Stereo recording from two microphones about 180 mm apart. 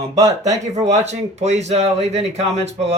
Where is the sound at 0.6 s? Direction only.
40° right (ahead or behind).